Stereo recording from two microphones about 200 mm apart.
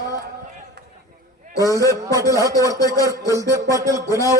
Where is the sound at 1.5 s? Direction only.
15° left (ahead or behind).